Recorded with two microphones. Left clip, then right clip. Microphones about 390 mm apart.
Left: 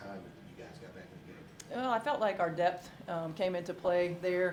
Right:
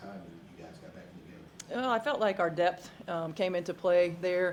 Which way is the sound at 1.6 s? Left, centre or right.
Right.